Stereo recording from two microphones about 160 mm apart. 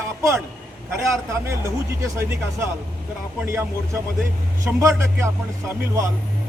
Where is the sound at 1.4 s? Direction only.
15° right (ahead or behind).